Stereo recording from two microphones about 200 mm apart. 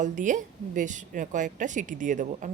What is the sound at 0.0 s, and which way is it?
A woman's voice, 40° right (ahead or behind).